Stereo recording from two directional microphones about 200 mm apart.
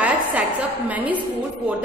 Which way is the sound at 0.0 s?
10° right (ahead or behind).